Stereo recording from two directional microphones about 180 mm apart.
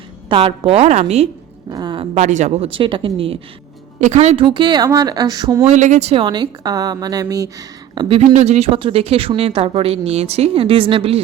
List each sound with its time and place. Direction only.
0.3 s a woman's voice: 30° right (ahead or behind)
1.7 s a sound: 25° right (ahead or behind)
2.2 s a woman's voice: 40° right (ahead or behind); by 5.6 s 20° right (ahead or behind)
5.6 s a woman's voice: 40° right (ahead or behind); by 7.5 s 20° right (ahead or behind)
7.9 s a woman's voice: 30° right (ahead or behind)